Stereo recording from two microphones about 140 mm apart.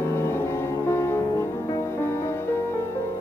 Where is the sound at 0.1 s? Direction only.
15° left (ahead or behind).